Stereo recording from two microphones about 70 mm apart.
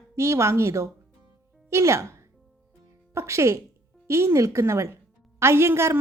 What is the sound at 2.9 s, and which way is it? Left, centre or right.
Music, right.